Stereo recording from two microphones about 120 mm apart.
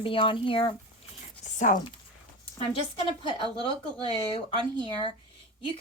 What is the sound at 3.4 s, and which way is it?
A woman's voice, 50° left (ahead or behind).